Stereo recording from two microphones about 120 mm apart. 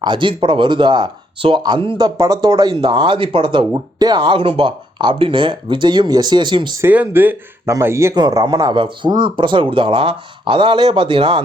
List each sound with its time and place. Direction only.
0.0 s speech: 40° right (ahead or behind)
2.1 s speech: 30° right (ahead or behind)
6.8 s speech: 15° right (ahead or behind)
8.1 s speech: 35° right (ahead or behind)